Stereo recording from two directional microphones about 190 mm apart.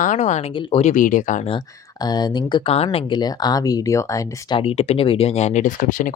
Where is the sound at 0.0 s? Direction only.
40° left (ahead or behind).